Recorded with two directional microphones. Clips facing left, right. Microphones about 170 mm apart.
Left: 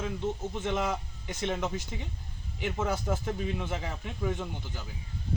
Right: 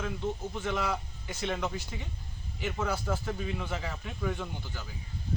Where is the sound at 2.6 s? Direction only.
15° left (ahead or behind).